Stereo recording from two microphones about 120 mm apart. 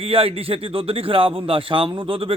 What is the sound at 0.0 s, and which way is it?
Speech, 50° right (ahead or behind).